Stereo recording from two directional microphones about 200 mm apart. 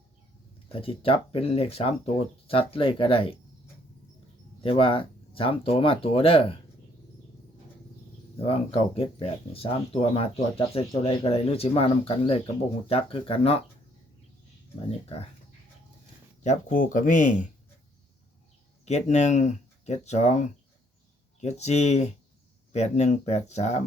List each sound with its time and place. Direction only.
0.7 s speech: 30° left (ahead or behind)
4.6 s speech: 25° left (ahead or behind)
8.4 s speech: 30° left (ahead or behind)
14.8 s speech: 30° left (ahead or behind)
16.4 s speech: 35° left (ahead or behind)
18.9 s speech: 35° left (ahead or behind)